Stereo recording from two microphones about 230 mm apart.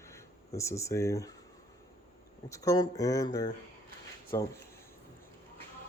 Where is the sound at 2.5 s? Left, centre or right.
Centre.